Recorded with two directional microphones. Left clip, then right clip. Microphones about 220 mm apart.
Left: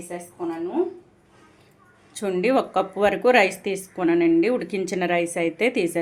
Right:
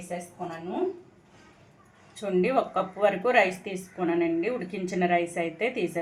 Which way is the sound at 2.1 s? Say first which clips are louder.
Left 4 dB; 45° left (ahead or behind).